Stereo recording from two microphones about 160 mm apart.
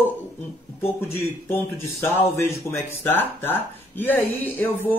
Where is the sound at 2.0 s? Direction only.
15° left (ahead or behind).